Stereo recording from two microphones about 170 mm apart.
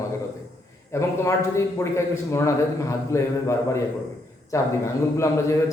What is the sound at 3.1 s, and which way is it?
A man's voice, 15° left (ahead or behind).